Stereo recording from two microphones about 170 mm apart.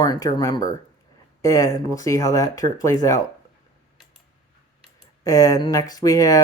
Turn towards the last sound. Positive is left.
turn(degrees=20)  # may be behind; listen again after turning